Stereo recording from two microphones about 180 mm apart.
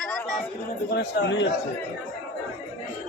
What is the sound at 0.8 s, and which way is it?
Speech, 65° left (ahead or behind).